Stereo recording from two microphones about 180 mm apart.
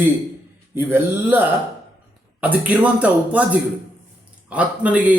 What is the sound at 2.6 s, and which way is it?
Speech, 10° right (ahead or behind).